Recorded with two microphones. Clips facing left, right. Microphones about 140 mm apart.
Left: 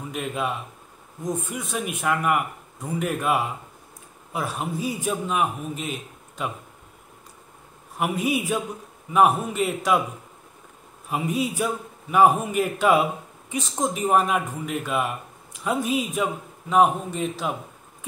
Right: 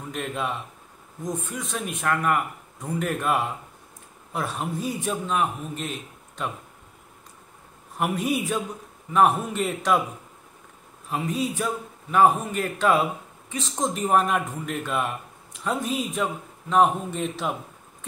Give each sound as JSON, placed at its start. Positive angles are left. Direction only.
{"t": 0.1, "sound": "speech", "side_deg": 5}
{"t": 8.0, "sound": "speech", "side_deg": 5}
{"t": 11.1, "sound": "speech", "side_deg": 10}